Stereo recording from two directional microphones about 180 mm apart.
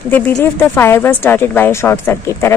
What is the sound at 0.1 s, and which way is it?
A woman's voice, 10° left (ahead or behind).